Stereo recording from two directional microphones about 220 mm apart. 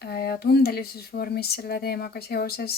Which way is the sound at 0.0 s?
45° left (ahead or behind).